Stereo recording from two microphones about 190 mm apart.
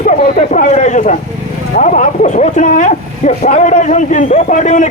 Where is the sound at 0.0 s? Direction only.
45° left (ahead or behind).